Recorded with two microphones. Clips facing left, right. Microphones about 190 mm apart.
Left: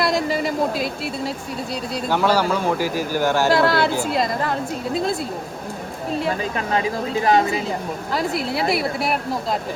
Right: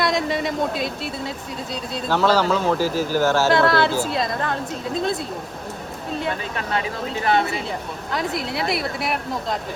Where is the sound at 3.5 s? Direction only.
Centre (ahead or behind).